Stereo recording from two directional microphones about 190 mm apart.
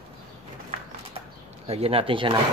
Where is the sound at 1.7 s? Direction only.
30° right (ahead or behind).